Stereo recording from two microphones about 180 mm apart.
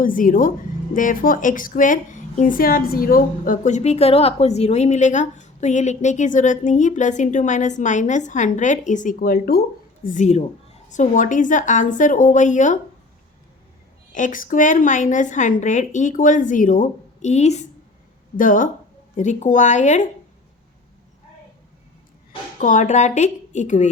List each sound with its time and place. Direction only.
0.0 s a woman's voice: 50° left (ahead or behind)
14.1 s a woman's voice: 45° left (ahead or behind)
22.5 s speech: 45° left (ahead or behind)